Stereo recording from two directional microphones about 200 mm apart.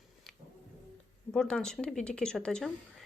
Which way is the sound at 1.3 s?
5° left (ahead or behind).